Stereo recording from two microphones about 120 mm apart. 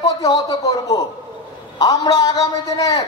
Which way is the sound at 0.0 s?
35° left (ahead or behind).